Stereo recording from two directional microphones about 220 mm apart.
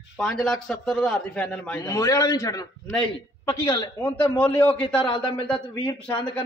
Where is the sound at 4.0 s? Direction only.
5° left (ahead or behind).